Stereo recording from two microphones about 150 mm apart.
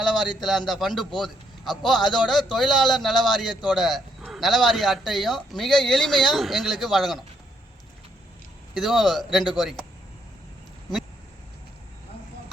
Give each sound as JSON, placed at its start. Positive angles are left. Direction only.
{"t": 0.0, "sound": "bird", "side_deg": 0}
{"t": 0.4, "sound": "speech", "side_deg": 0}
{"t": 8.7, "sound": "speech", "side_deg": 0}